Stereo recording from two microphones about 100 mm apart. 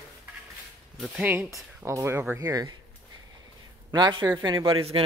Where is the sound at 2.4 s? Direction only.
40° right (ahead or behind).